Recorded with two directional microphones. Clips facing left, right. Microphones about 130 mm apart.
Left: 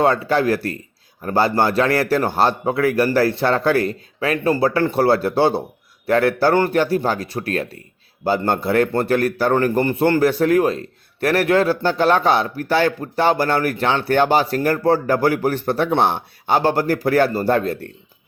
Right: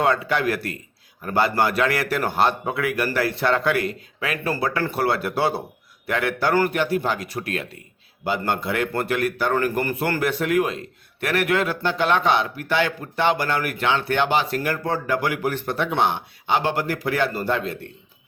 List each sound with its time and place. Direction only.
0.0 s speech: 35° left (ahead or behind)